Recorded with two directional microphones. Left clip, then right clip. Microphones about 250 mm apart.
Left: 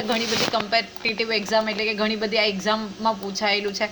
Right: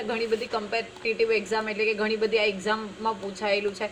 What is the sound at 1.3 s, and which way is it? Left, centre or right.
A woman's voice, left.